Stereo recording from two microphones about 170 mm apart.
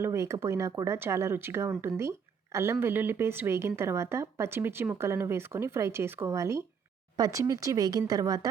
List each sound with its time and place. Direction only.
0.0 s a woman's voice: 15° right (ahead or behind)